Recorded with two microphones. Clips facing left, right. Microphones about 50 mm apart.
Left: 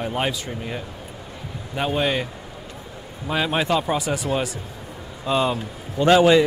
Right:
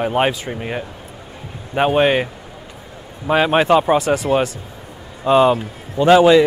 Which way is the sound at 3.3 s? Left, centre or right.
Right.